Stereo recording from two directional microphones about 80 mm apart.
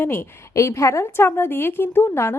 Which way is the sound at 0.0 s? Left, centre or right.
Left.